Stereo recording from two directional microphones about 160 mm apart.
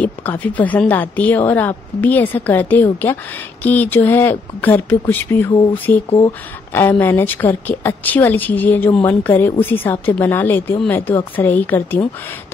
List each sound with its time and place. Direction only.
0.0 s a woman's voice: 10° left (ahead or behind)
6.0 s speech: 30° left (ahead or behind)
6.7 s a woman's voice: 15° left (ahead or behind)